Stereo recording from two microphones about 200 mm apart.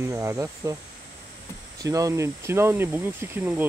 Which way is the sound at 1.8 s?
15° right (ahead or behind).